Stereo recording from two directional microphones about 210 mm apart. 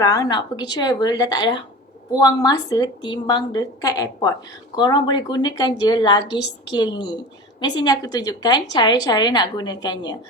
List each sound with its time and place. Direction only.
0.0 s a woman's voice: 15° left (ahead or behind)